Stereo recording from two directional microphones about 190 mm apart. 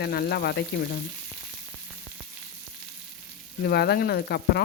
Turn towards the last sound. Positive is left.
turn(degrees=55)  # may be behind; listen again after turning